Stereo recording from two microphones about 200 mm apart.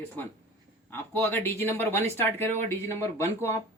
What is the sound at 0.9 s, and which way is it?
Speech, 10° left (ahead or behind).